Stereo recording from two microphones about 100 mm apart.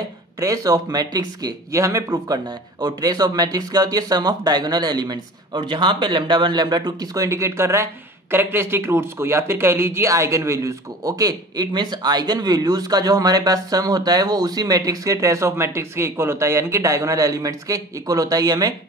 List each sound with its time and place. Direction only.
0.4 s speech: 35° right (ahead or behind)